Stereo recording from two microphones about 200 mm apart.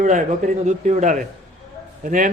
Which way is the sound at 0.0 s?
35° right (ahead or behind).